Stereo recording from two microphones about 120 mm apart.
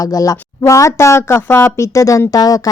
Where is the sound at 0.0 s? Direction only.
30° left (ahead or behind).